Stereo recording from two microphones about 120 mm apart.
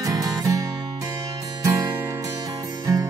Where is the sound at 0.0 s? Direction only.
30° right (ahead or behind).